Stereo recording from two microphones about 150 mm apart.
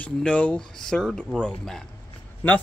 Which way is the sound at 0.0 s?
5° left (ahead or behind).